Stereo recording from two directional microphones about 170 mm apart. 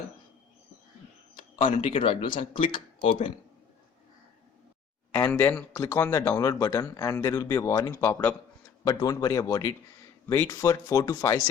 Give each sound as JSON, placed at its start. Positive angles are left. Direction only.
{"t": 1.9, "sound": "speech", "side_deg": 30}
{"t": 5.1, "sound": "speech", "side_deg": 10}